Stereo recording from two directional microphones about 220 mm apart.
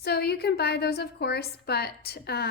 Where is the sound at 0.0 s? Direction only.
45° left (ahead or behind).